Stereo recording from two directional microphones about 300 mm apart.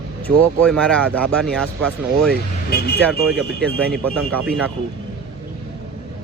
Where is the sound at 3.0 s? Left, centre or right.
Centre.